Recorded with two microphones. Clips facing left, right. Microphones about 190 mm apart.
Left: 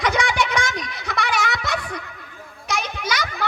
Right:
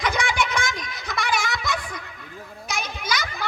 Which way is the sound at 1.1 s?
60° left (ahead or behind).